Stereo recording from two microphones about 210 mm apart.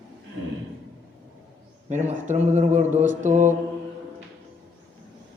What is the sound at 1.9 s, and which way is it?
Speech, 35° right (ahead or behind).